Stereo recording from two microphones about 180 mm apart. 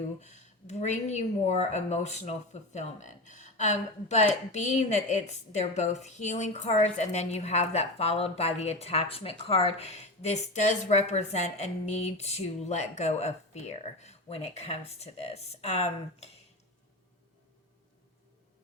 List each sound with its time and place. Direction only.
0.2 s a woman's voice: 40° left (ahead or behind)